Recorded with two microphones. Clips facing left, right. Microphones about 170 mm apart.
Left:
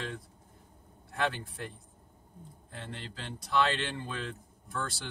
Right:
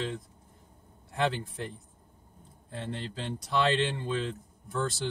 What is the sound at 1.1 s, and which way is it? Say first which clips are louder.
Speech: right 3 dB; 20° right (ahead or behind).